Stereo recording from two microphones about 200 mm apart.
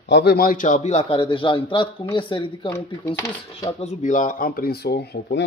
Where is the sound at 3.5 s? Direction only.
30° left (ahead or behind); by 5.4 s 55° left (ahead or behind).